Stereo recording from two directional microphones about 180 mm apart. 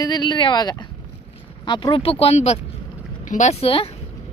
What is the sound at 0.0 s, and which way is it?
Speech, 20° left (ahead or behind).